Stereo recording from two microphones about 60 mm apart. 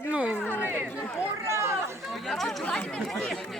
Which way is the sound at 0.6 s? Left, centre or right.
Right.